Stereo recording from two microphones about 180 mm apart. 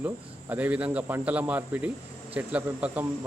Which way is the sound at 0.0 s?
10° right (ahead or behind).